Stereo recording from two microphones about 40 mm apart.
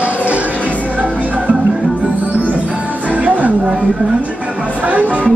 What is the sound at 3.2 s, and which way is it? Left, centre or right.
Music, right.